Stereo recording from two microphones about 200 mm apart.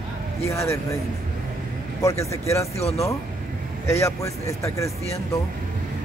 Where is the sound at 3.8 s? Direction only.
15° left (ahead or behind).